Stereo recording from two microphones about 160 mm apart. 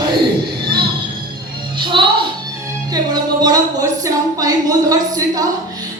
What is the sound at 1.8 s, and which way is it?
Music, 30° right (ahead or behind).